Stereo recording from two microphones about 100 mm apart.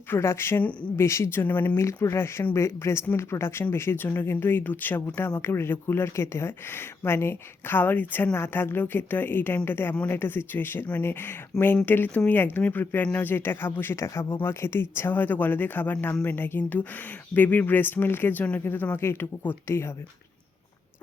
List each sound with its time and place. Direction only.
0.1 s a woman's voice: 25° left (ahead or behind)
11.5 s speech: 5° left (ahead or behind)
11.9 s a woman's voice: 20° left (ahead or behind)